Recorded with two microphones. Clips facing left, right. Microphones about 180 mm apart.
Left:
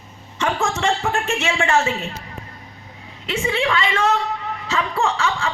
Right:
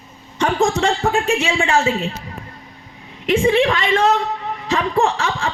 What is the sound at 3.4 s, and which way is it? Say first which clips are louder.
Speech: right 6 dB; 35° right (ahead or behind).